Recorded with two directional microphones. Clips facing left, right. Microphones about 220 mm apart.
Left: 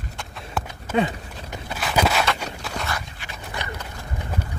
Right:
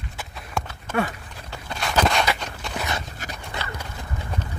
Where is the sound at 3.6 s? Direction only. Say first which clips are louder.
Left 2 dB; 15° left (ahead or behind).